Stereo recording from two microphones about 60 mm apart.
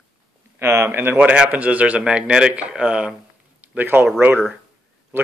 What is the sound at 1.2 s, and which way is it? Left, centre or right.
Speech, right.